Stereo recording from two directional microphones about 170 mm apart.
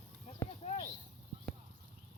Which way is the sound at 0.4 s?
15° left (ahead or behind).